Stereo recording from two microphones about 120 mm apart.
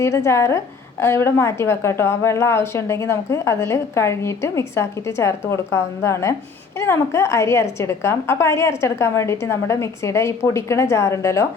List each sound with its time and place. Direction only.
0.0 s a woman's voice: 25° left (ahead or behind)